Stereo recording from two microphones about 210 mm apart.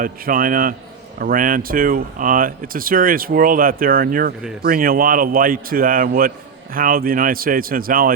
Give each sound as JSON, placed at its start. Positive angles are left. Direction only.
{"t": 0.0, "sound": "a man's voice", "side_deg": -40}